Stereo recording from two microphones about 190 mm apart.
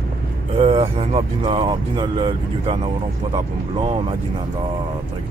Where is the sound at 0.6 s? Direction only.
30° right (ahead or behind).